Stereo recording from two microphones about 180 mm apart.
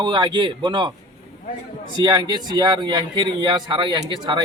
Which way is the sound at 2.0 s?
25° right (ahead or behind).